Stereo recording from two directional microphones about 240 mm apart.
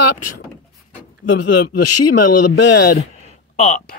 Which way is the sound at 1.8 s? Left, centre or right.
Left.